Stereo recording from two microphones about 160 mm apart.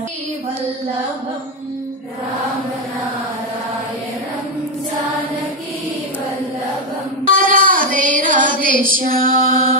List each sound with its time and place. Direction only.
7.2 s child singing: 55° right (ahead or behind)
8.8 s mantra: 60° right (ahead or behind)